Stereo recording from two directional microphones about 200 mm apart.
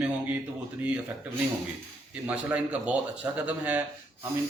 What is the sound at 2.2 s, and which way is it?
A man's voice, 5° right (ahead or behind).